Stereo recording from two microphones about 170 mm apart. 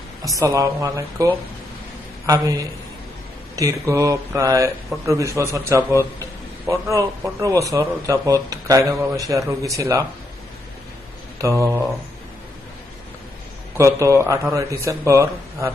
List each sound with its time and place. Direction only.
0.2 s speech: 20° right (ahead or behind)
11.4 s speech: 15° right (ahead or behind)
13.7 s speech: 20° right (ahead or behind)